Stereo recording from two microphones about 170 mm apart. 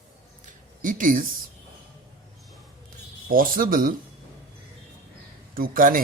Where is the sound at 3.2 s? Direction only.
55° right (ahead or behind).